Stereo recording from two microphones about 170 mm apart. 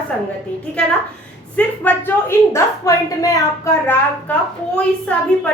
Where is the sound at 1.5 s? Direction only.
10° left (ahead or behind).